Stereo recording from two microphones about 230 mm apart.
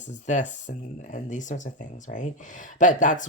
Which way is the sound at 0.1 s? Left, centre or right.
Left.